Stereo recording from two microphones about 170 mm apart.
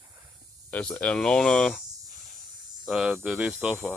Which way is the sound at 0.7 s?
5° left (ahead or behind).